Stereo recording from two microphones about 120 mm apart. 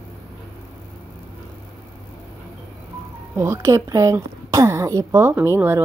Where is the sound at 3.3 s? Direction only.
25° right (ahead or behind).